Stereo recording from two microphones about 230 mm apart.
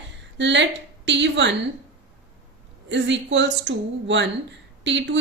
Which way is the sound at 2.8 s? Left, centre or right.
Right.